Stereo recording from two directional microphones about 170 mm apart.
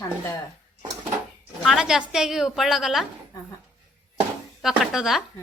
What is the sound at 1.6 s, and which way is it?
A woman's voice, centre (ahead or behind).